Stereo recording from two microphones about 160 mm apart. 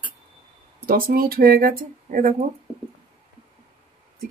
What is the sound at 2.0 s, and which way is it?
Speech, 55° right (ahead or behind).